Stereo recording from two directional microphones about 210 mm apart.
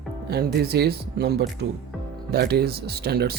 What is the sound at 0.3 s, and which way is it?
Speech, 50° right (ahead or behind).